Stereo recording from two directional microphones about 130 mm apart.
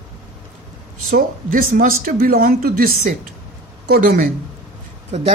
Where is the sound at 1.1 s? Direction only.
90° right.